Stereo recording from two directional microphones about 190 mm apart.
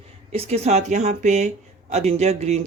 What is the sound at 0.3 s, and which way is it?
Speech, 35° right (ahead or behind).